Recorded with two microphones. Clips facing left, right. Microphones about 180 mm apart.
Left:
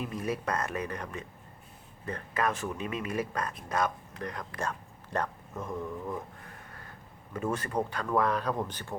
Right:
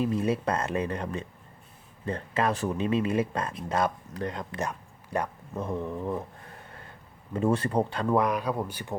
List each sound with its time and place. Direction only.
0.0 s speech: 30° right (ahead or behind); by 5.3 s 10° right (ahead or behind)
5.5 s speech: 30° right (ahead or behind)
7.3 s speech: 30° right (ahead or behind)
8.2 s speech: 10° right (ahead or behind)